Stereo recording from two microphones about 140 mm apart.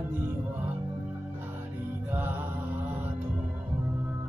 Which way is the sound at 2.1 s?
15° right (ahead or behind).